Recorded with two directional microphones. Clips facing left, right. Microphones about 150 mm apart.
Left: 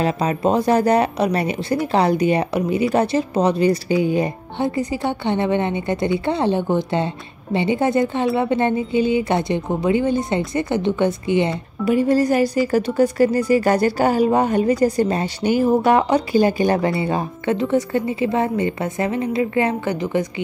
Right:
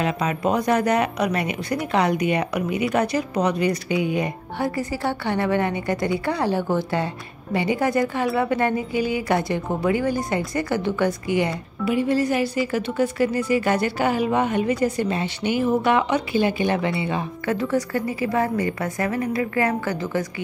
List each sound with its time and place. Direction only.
0.0 s a woman's voice: 35° left (ahead or behind)
11.8 s speech: 40° left (ahead or behind)
17.5 s a woman's voice: 25° left (ahead or behind)